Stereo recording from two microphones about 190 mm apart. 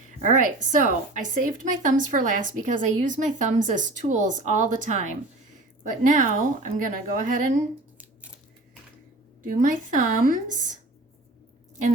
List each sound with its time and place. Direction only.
0.2 s a woman's voice: 40° right (ahead or behind)
9.6 s a woman's voice: 45° right (ahead or behind)